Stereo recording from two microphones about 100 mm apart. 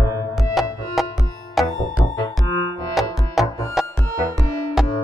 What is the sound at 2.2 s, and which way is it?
Music, 45° left (ahead or behind).